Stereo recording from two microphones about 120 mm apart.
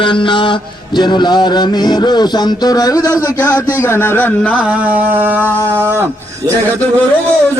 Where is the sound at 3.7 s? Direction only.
20° left (ahead or behind).